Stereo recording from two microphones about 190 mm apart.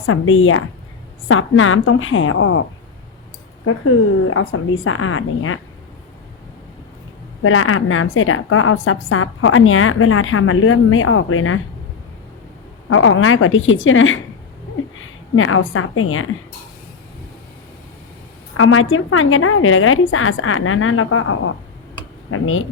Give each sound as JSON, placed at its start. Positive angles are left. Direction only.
{"t": 0.0, "sound": "a woman's voice", "side_deg": 90}
{"t": 3.7, "sound": "a woman's voice", "side_deg": 90}
{"t": 7.4, "sound": "a woman's voice", "side_deg": 90}
{"t": 12.9, "sound": "a woman's voice", "side_deg": 90}
{"t": 15.4, "sound": "a woman's voice", "side_deg": 90}
{"t": 18.5, "sound": "a woman's voice", "side_deg": 90}